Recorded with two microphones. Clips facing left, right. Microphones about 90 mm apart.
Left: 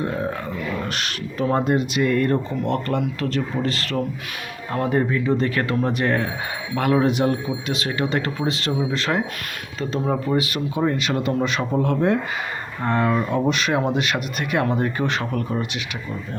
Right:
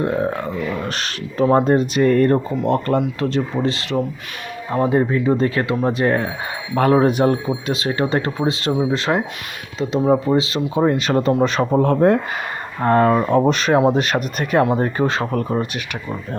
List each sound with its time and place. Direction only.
0.9 s speech: 35° right (ahead or behind)
5.1 s speech: 35° right (ahead or behind)
10.8 s speech: 35° right (ahead or behind)